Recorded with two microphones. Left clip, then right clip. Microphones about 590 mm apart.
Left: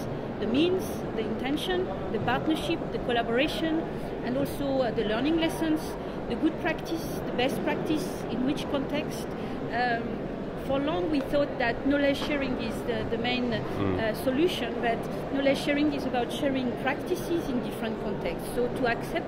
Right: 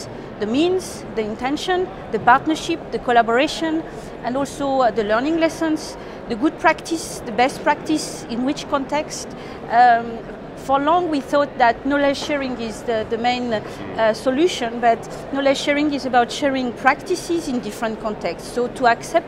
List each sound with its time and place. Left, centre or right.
0.5 s a woman's voice: right
18.6 s a woman's voice: right